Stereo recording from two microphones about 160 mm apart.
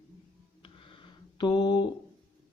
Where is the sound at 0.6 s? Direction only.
30° left (ahead or behind).